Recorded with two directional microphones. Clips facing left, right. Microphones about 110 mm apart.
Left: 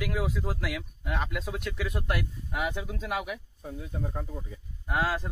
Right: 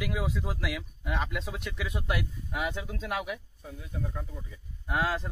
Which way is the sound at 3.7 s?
40° left (ahead or behind).